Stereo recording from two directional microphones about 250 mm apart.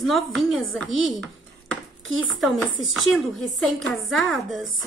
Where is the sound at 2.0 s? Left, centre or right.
Right.